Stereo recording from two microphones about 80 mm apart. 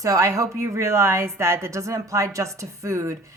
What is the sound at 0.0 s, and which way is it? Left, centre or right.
A woman's voice, right.